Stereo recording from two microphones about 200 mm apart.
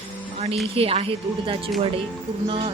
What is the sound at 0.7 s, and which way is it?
Speech, 30° right (ahead or behind).